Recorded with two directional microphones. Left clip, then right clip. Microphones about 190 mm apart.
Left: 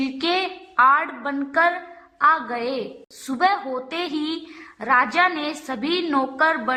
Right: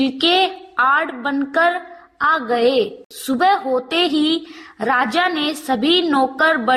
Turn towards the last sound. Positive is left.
turn(degrees=-20)  # may be behind; listen again after turning